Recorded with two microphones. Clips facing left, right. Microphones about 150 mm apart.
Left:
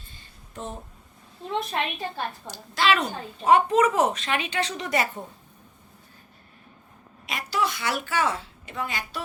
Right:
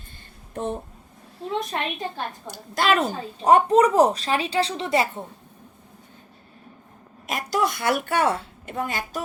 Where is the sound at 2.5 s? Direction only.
50° right (ahead or behind); by 5.2 s 25° right (ahead or behind).